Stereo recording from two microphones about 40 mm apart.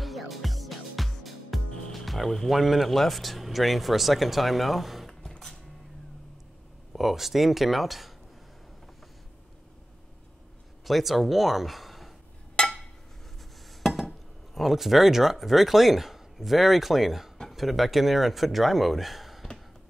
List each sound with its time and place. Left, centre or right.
0.0 s music: centre
2.5 s speech: centre
6.9 s speech: centre
10.9 s speech: centre
12.6 s a sound: left
13.7 s speech: centre